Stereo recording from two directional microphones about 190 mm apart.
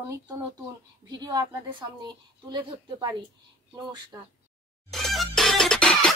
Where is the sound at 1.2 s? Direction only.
20° right (ahead or behind).